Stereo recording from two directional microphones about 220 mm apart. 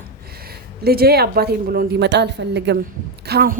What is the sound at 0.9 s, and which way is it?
A woman's voice, 45° right (ahead or behind).